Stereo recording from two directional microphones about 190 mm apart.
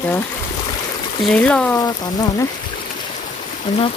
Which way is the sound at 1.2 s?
5° left (ahead or behind).